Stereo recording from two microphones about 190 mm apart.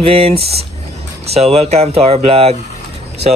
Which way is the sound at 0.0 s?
30° right (ahead or behind).